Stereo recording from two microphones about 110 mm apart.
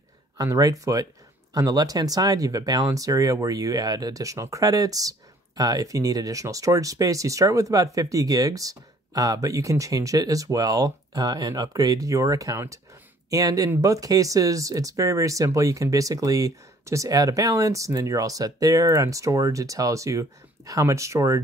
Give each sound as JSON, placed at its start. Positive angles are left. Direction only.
{"t": 0.4, "sound": "speech", "side_deg": -35}